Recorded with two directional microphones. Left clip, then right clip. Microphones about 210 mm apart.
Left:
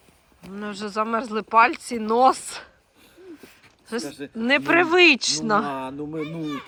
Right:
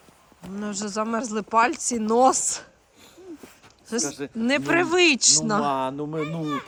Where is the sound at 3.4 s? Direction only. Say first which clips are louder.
Even; 10° right (ahead or behind).